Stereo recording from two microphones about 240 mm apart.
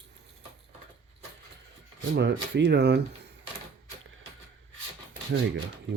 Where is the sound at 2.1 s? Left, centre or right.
Right.